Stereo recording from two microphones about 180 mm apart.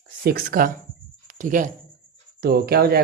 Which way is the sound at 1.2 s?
45° right (ahead or behind).